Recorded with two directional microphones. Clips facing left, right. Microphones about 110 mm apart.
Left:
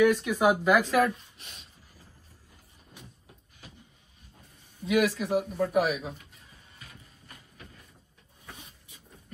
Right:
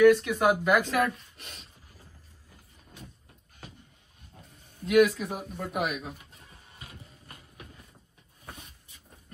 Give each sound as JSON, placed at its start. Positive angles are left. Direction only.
{"t": 0.0, "sound": "speech", "side_deg": 5}
{"t": 1.3, "sound": "speech", "side_deg": -55}
{"t": 4.8, "sound": "speech", "side_deg": 0}